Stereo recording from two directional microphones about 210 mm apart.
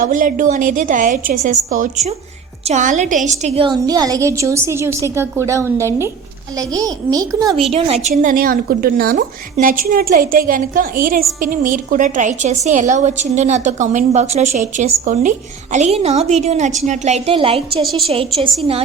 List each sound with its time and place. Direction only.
0.0 s a woman's voice: 40° right (ahead or behind); by 7.5 s 15° right (ahead or behind)
7.7 s a woman's voice: 30° right (ahead or behind)
8.1 s a woman's voice: 40° right (ahead or behind); by 17.8 s 25° right (ahead or behind)
17.8 s a woman's voice: centre (ahead or behind)